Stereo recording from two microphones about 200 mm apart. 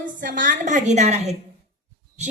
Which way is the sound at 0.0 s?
40° right (ahead or behind).